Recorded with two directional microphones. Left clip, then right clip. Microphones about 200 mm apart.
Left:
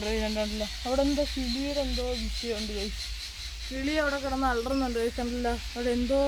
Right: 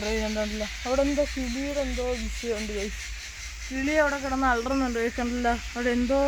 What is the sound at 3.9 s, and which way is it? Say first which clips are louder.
Speech: right 4 dB; 55° right (ahead or behind).